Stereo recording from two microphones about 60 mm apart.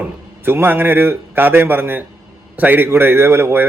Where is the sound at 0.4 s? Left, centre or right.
Right.